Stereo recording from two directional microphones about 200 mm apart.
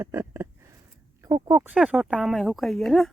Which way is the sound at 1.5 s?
15° right (ahead or behind).